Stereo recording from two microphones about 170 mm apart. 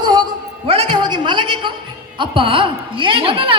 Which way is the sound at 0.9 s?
25° right (ahead or behind).